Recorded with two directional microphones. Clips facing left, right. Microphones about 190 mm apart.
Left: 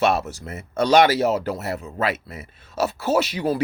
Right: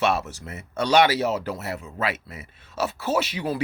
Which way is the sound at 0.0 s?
40° left (ahead or behind).